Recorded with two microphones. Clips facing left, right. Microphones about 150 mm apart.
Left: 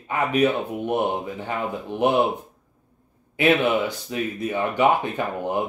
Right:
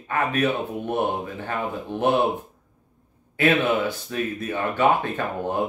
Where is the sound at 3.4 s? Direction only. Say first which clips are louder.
Left 1 dB; 20° left (ahead or behind).